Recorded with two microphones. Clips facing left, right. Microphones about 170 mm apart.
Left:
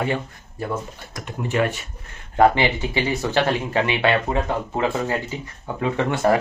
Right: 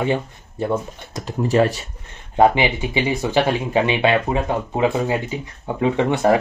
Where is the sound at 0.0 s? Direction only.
25° right (ahead or behind).